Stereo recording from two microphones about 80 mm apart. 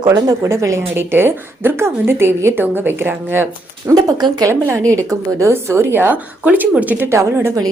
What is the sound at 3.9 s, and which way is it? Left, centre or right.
Speech, right.